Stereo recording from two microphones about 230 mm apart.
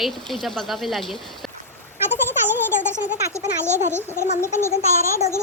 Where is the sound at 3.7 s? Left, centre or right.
Right.